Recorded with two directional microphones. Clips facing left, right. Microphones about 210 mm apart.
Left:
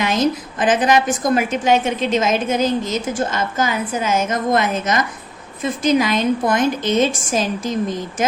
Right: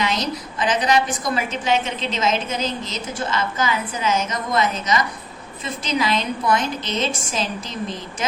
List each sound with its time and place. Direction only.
0.0 s a woman's voice: 50° left (ahead or behind)